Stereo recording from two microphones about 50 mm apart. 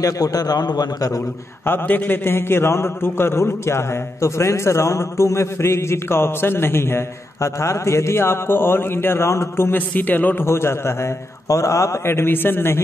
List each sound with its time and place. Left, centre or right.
1.7 s a man's voice: left
2.2 s a man's voice: left
7.4 s a man's voice: left
9.7 s a man's voice: left
10.4 s a man's voice: left
11.4 s a man's voice: left
12.1 s a man's voice: left